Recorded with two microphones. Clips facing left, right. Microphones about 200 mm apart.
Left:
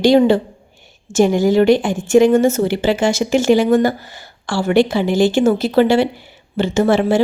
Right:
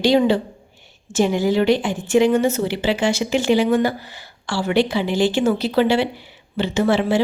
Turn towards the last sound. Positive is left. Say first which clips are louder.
# left 4 dB
turn(degrees=50)  # may be behind; listen again after turning